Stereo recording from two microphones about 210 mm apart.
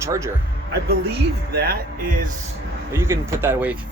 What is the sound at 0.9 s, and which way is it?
Speech, 50° right (ahead or behind).